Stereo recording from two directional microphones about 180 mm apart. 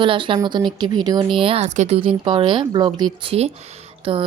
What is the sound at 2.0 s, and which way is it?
Speech, 30° right (ahead or behind).